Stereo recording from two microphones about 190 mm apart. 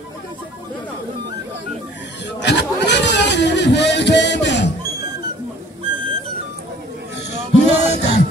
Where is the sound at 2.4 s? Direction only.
65° left (ahead or behind).